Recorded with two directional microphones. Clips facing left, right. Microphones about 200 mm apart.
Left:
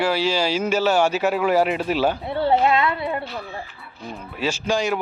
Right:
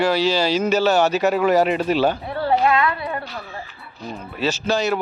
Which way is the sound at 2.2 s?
25° left (ahead or behind).